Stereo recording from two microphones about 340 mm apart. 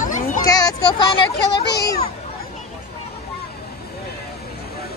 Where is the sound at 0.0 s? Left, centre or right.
Left.